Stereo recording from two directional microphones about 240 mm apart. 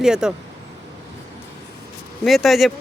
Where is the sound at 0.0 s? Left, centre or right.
Centre.